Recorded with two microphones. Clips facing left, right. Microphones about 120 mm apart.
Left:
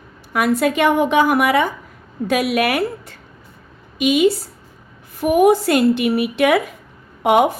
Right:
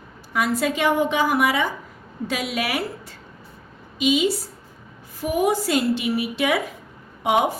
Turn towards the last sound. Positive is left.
turn(degrees=60)  # may be behind; listen again after turning